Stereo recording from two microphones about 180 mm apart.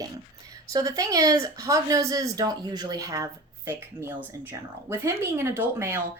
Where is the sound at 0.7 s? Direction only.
20° right (ahead or behind).